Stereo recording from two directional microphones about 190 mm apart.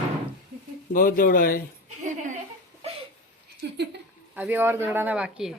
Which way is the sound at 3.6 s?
60° right (ahead or behind).